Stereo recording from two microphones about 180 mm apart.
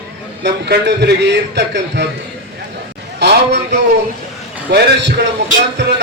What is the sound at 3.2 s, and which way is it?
Speech, 70° right (ahead or behind).